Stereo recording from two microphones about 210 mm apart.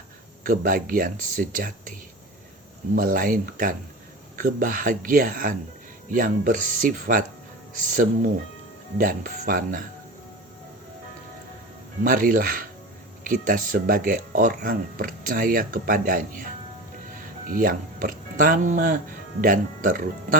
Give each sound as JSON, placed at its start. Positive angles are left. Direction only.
{"t": 0.4, "sound": "speech", "side_deg": -40}
{"t": 2.9, "sound": "speech", "side_deg": -40}
{"t": 12.0, "sound": "speech", "side_deg": -40}
{"t": 17.5, "sound": "speech", "side_deg": -40}